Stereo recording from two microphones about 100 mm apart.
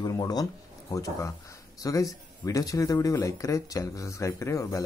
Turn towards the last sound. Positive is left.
turn(degrees=30)  # may be behind; listen again after turning